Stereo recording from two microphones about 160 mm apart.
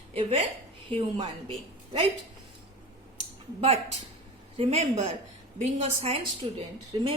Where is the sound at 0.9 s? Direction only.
35° right (ahead or behind).